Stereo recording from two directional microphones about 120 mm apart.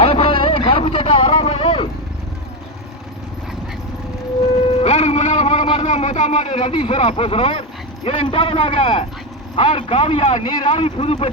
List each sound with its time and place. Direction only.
0.0 s vehicle: 55° left (ahead or behind)
4.8 s music: 60° left (ahead or behind)
5.9 s a man's voice: 75° left (ahead or behind); by 11.3 s 55° left (ahead or behind)